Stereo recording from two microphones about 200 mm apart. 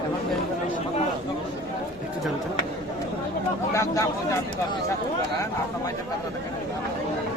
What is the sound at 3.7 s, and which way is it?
Speech, 15° left (ahead or behind).